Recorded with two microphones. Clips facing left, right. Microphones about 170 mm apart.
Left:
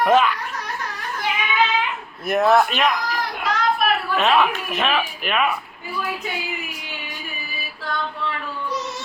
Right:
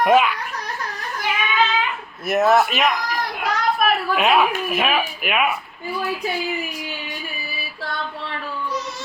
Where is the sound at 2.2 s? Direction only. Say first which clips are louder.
Even; 5° right (ahead or behind).